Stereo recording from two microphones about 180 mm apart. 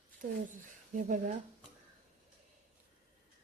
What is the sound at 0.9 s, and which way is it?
Speech, 45° right (ahead or behind).